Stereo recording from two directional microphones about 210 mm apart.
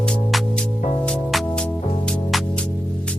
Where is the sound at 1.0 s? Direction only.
Centre (ahead or behind).